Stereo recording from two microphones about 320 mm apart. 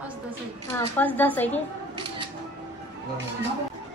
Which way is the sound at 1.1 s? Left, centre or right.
Centre.